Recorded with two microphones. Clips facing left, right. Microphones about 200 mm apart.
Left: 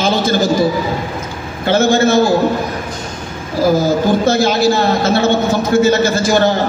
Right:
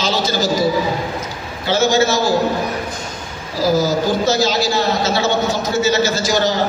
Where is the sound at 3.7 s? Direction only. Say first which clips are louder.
Left 3 dB; 55° left (ahead or behind).